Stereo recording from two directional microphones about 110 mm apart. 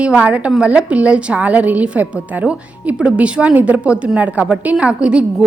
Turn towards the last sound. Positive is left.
turn(degrees=-10)  # may be behind; listen again after turning